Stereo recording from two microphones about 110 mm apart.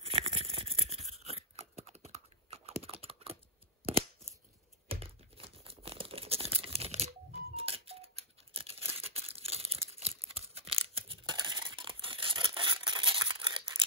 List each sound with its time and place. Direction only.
0.0 s toothbrush: 60° right (ahead or behind)
1.2 s computer keyboard: 70° right (ahead or behind)
4.8 s crumpling: 60° right (ahead or behind)
7.5 s tearing: 60° right (ahead or behind)